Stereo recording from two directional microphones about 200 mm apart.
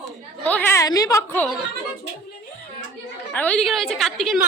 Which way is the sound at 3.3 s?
5° left (ahead or behind).